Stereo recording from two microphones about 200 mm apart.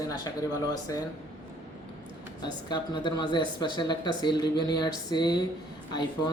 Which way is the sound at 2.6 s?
25° left (ahead or behind).